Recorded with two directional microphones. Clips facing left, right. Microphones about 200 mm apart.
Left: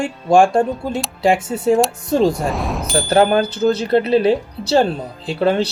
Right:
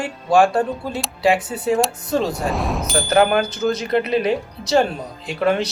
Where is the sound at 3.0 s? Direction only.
30° left (ahead or behind).